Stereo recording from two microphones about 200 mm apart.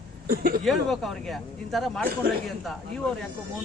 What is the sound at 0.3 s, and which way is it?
Speech, 50° right (ahead or behind).